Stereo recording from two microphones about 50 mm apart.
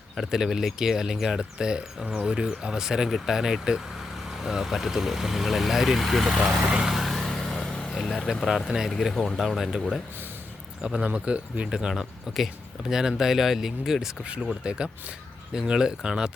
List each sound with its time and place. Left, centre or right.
0.2 s speech: centre
6.6 s vehicle: centre
7.6 s vehicle: centre
7.9 s speech: centre
10.8 s speech: right
14.4 s speech: centre